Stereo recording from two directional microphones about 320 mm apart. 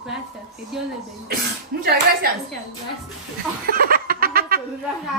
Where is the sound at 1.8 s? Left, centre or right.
Right.